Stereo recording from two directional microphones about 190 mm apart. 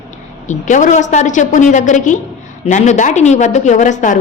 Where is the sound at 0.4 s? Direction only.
40° left (ahead or behind).